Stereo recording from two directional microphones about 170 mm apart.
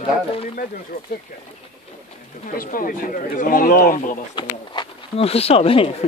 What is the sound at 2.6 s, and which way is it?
Speech, 55° left (ahead or behind).